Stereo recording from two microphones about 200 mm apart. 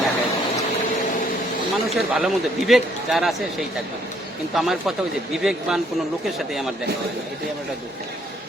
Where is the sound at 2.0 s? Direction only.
Centre (ahead or behind).